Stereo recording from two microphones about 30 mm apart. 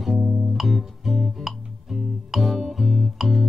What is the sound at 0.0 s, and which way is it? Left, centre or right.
Music, centre.